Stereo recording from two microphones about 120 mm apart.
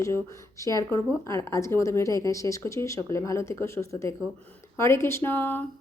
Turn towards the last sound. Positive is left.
turn(degrees=15)  # may be behind; listen again after turning